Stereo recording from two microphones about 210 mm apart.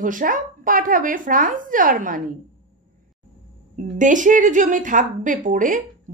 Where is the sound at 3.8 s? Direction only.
35° right (ahead or behind).